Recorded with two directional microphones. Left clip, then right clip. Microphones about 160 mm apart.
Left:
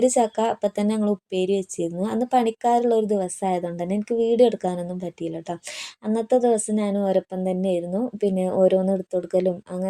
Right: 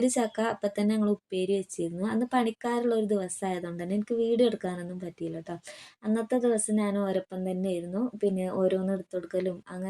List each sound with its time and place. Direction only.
0.0 s a woman's voice: 30° left (ahead or behind)